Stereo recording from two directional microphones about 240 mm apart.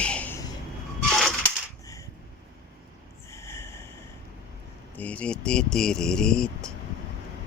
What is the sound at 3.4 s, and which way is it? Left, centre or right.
Snort, centre.